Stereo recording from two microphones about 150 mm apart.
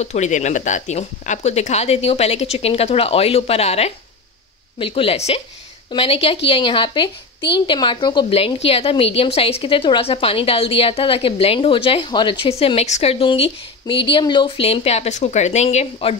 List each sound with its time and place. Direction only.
0.0 s a woman's voice: 50° left (ahead or behind)